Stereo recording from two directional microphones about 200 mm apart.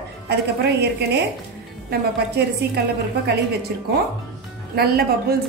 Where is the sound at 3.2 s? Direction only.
55° right (ahead or behind).